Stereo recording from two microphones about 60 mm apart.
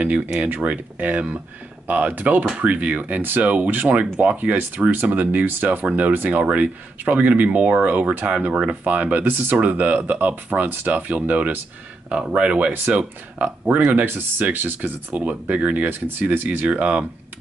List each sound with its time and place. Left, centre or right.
0.4 s speech: right
16.4 s speech: right